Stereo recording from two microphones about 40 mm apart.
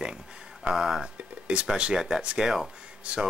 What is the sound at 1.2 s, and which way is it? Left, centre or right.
Speech, right.